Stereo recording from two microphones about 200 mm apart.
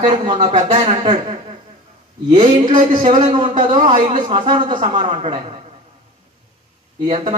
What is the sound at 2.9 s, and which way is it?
A man's voice, 25° right (ahead or behind).